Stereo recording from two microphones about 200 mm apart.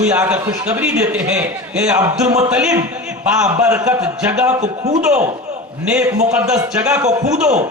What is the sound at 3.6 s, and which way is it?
A man's voice, 15° right (ahead or behind).